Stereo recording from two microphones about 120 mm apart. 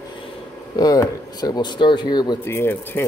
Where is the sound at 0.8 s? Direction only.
30° left (ahead or behind).